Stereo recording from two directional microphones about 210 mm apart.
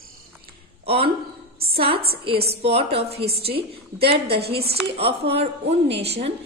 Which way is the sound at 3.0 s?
30° right (ahead or behind).